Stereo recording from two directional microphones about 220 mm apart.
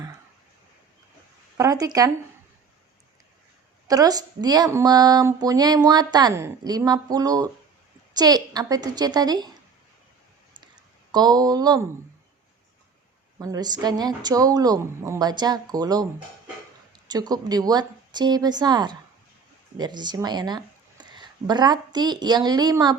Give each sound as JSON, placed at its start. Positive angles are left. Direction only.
{"t": 1.5, "sound": "speech", "side_deg": -15}
{"t": 3.8, "sound": "speech", "side_deg": -15}
{"t": 11.1, "sound": "speech", "side_deg": -20}
{"t": 13.4, "sound": "speech", "side_deg": -15}
{"t": 17.1, "sound": "speech", "side_deg": -15}